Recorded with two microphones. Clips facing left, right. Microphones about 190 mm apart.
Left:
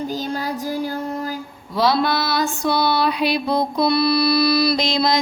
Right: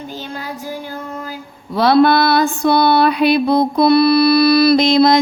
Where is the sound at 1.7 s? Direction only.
60° right (ahead or behind).